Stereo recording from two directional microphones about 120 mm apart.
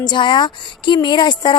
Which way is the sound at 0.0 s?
40° left (ahead or behind).